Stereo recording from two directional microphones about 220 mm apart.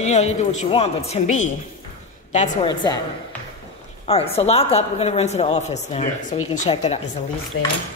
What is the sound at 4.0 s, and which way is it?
Speech, 25° left (ahead or behind).